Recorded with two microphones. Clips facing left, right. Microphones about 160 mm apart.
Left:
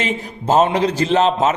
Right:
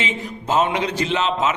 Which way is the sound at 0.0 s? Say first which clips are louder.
Left 4 dB; 40° left (ahead or behind).